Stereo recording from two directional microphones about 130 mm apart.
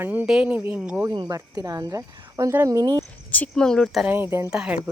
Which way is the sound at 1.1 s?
35° right (ahead or behind).